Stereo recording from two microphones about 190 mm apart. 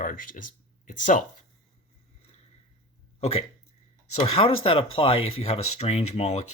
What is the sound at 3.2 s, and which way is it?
Speech, 30° left (ahead or behind).